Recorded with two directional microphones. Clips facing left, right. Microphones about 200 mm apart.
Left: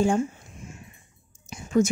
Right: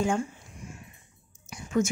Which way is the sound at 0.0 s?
30° left (ahead or behind).